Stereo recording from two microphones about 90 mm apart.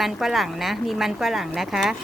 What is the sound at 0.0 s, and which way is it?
Speech, centre (ahead or behind).